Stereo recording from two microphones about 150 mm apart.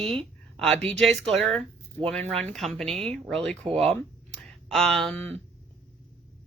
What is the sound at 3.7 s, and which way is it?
Speech, 45° right (ahead or behind).